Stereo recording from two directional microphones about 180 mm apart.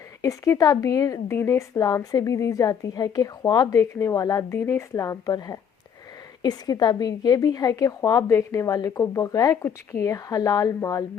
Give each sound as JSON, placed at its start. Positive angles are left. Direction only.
{"t": 0.2, "sound": "a woman's voice", "side_deg": 15}